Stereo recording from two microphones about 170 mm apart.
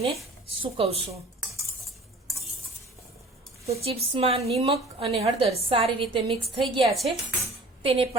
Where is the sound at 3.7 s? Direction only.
35° right (ahead or behind).